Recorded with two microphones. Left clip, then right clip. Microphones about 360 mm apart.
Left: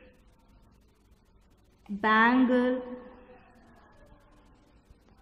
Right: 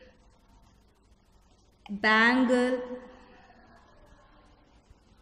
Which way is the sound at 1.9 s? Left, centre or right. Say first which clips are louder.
Even; centre.